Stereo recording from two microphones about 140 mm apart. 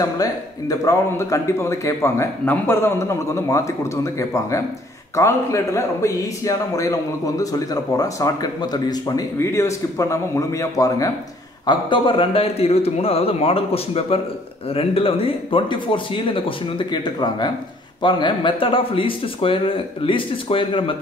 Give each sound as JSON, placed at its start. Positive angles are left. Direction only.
{"t": 0.0, "sound": "a man's voice", "side_deg": 25}
{"t": 11.6, "sound": "speech", "side_deg": 35}